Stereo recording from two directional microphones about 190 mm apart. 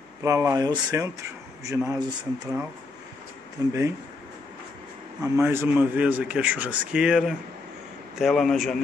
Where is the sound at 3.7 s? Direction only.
15° right (ahead or behind).